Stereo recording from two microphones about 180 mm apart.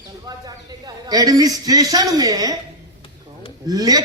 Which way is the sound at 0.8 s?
20° right (ahead or behind).